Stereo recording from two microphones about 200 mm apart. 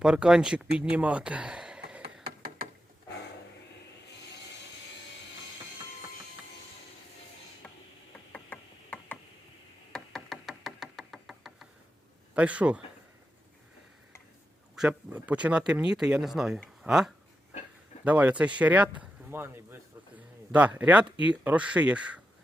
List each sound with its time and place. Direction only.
0.0 s speech: 5° right (ahead or behind)
2.2 s a sound: 50° right (ahead or behind)
7.6 s stir: 5° left (ahead or behind)
8.3 s tick-tock: 5° left (ahead or behind)
9.9 s knock: centre (ahead or behind)
12.3 s speech: 5° right (ahead or behind)
14.8 s speech: 5° right (ahead or behind)